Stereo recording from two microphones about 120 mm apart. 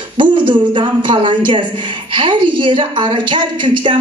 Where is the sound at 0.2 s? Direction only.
40° right (ahead or behind).